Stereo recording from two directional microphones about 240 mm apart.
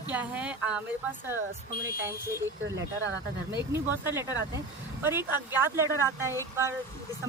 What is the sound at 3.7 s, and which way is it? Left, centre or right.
Speech, centre.